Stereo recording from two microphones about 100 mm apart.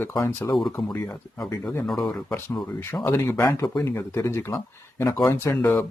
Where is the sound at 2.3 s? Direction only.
20° left (ahead or behind).